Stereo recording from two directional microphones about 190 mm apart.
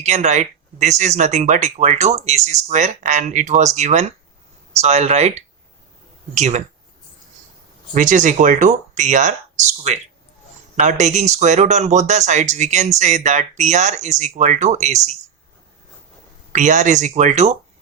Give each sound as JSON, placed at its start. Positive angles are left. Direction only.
{"t": 0.0, "sound": "speech", "side_deg": -40}
{"t": 7.9, "sound": "speech", "side_deg": -40}
{"t": 16.5, "sound": "speech", "side_deg": -40}